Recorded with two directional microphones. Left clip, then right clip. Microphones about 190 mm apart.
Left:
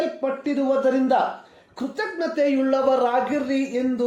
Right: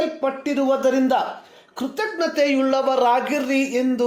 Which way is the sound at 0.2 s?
15° right (ahead or behind).